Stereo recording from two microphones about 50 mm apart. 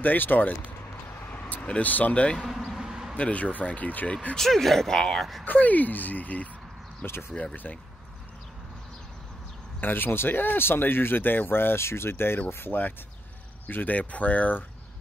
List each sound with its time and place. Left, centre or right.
0.0 s speech: left
2.7 s a sound: centre
3.2 s speech: left
4.4 s speech: centre
5.4 s speech: left
9.8 s speech: left
13.7 s speech: left